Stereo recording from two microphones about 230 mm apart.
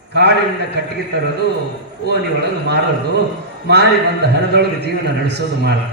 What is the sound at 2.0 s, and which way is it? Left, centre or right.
Speech, right.